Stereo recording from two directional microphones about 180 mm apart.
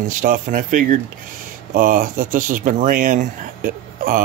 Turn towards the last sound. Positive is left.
turn(degrees=-50)  # may be behind; listen again after turning